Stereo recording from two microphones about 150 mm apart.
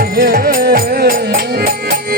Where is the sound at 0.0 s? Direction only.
85° right.